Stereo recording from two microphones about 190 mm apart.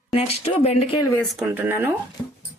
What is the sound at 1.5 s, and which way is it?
Speech, 10° right (ahead or behind).